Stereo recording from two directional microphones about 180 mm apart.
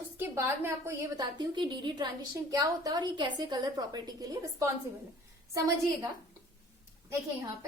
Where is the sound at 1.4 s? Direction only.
25° right (ahead or behind).